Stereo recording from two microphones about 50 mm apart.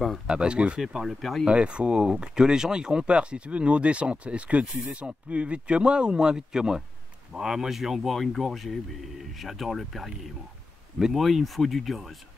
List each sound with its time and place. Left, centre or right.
0.3 s speech: centre
1.4 s speech: right; by 10.0 s centre
11.0 s speech: centre
11.2 s speech: centre